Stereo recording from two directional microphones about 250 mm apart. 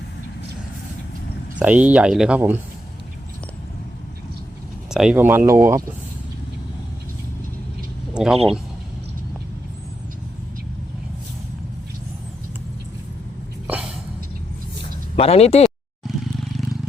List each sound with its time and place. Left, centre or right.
1.5 s speech: centre
4.9 s speech: centre
8.1 s speech: centre
13.7 s a sound: centre
15.1 s speech: left
16.0 s roar: centre